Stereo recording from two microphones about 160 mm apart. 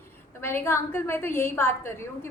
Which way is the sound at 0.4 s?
15° left (ahead or behind).